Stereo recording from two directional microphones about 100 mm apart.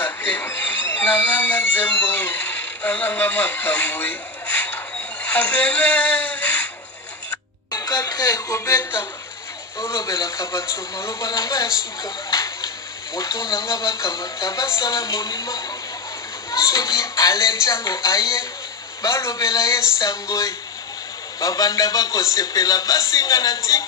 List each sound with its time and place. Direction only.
0.0 s speech: 20° left (ahead or behind)
5.2 s music: 15° left (ahead or behind)
7.7 s a man's voice: 40° left (ahead or behind)